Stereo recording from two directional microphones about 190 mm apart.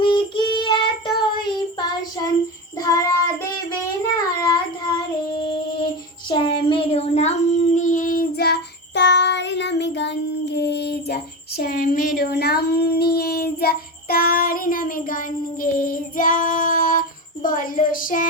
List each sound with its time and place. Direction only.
0.0 s child singing: 25° left (ahead or behind)
2.7 s child singing: 20° left (ahead or behind); by 18.3 s 45° left (ahead or behind)